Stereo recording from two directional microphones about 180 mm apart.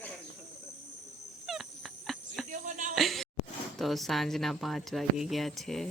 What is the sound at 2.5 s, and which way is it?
Music, 45° right (ahead or behind).